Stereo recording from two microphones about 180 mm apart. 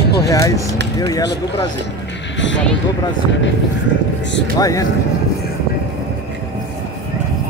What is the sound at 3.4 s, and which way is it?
Speech, 90° left.